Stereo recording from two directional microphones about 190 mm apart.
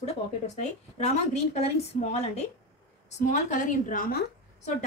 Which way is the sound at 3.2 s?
40° left (ahead or behind).